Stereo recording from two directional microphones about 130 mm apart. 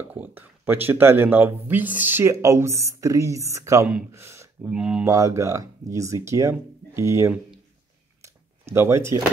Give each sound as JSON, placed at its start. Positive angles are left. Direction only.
{"t": 0.1, "sound": "speech", "side_deg": -15}
{"t": 4.6, "sound": "speech", "side_deg": -5}
{"t": 5.0, "sound": "speech", "side_deg": -25}
{"t": 8.2, "sound": "a sound", "side_deg": -20}